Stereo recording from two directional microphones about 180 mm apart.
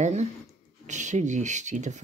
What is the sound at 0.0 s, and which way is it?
Speech, 40° right (ahead or behind).